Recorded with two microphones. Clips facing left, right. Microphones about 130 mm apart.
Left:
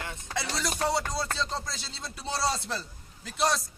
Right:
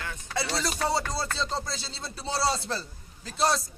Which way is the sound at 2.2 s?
5° right (ahead or behind).